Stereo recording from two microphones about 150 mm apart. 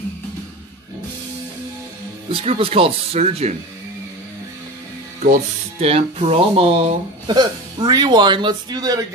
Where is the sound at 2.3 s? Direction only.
40° right (ahead or behind).